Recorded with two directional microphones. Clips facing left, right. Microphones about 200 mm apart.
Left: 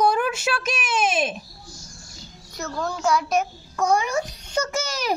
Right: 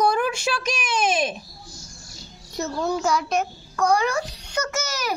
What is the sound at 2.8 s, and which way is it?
Speech, centre (ahead or behind).